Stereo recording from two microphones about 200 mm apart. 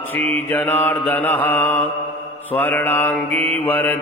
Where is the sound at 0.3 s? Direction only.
10° left (ahead or behind).